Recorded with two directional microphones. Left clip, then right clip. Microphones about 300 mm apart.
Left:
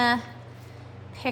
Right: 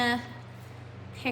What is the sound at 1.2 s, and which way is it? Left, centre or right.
Speech, centre.